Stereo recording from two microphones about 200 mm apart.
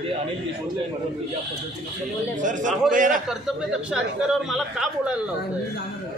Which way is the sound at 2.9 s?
40° right (ahead or behind).